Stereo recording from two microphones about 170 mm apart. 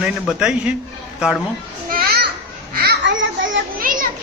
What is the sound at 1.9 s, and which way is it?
Children playing, 65° right (ahead or behind).